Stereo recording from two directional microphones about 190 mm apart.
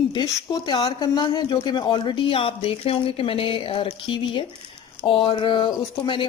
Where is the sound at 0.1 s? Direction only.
20° left (ahead or behind).